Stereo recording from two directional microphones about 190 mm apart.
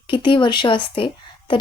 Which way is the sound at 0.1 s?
25° left (ahead or behind).